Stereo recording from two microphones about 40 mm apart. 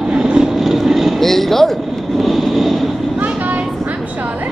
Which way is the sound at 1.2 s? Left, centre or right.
Centre.